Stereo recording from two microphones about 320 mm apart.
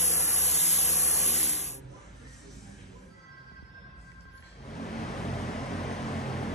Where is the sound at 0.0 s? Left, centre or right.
Left.